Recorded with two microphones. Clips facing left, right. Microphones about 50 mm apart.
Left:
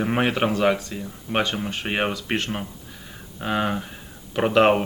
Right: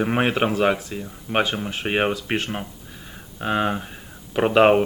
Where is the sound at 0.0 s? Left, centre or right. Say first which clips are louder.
Right 1 dB; centre.